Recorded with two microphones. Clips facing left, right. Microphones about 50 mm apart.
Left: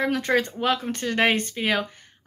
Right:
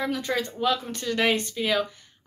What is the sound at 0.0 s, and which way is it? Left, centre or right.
Speech, left.